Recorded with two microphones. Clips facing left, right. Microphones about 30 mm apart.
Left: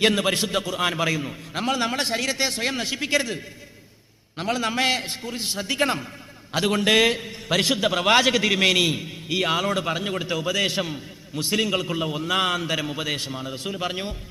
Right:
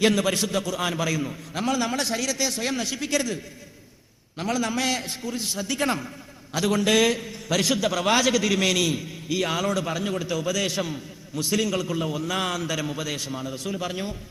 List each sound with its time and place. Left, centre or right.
0.0 s a man's voice: left